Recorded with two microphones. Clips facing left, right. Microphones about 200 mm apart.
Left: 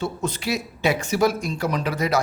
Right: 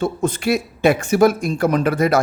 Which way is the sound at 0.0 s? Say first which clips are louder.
Right 6 dB; 50° right (ahead or behind).